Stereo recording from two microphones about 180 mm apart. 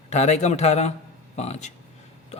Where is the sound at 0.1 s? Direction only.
40° left (ahead or behind).